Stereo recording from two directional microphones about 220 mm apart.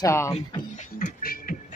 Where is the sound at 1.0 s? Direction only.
40° left (ahead or behind).